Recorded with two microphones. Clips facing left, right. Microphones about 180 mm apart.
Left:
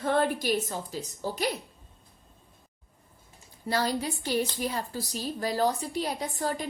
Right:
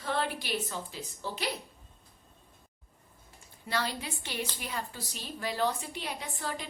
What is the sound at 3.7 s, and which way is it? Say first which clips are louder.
A woman's voice: left 6 dB; 40° left (ahead or behind).